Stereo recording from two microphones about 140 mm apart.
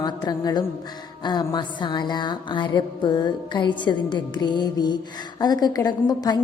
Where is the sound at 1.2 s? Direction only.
30° left (ahead or behind).